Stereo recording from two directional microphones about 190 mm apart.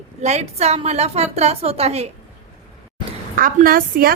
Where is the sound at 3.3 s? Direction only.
50° right (ahead or behind).